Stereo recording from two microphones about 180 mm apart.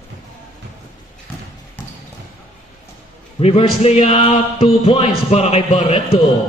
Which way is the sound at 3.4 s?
35° left (ahead or behind).